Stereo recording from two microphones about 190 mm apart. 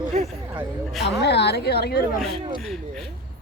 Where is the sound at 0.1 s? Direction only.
35° right (ahead or behind).